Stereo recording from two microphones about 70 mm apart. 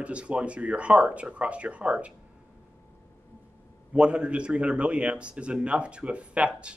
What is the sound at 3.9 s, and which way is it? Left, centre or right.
A man's voice, centre.